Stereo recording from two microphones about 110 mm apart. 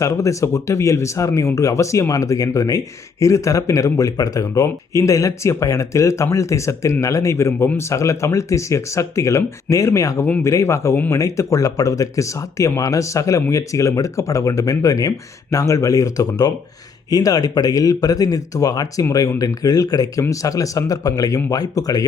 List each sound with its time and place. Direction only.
0.0 s speech: 30° left (ahead or behind)